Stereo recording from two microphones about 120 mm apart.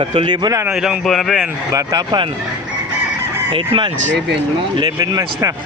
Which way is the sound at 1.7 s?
35° right (ahead or behind).